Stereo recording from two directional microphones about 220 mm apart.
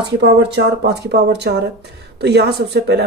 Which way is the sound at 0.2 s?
50° right (ahead or behind).